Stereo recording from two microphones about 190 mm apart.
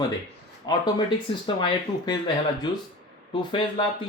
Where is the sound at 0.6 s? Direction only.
20° left (ahead or behind).